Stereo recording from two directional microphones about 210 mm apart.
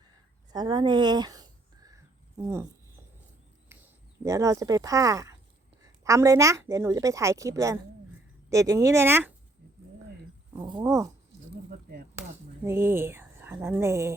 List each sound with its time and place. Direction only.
0.5 s a sound: 20° right (ahead or behind)
2.3 s a woman's voice: 15° right (ahead or behind)
4.2 s a woman's voice: 15° right (ahead or behind)
10.5 s speech: 20° right (ahead or behind)
12.6 s a woman's voice: 10° right (ahead or behind)